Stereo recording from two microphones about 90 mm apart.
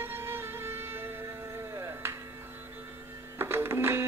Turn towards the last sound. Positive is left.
turn(degrees=-25)  # may be behind; listen again after turning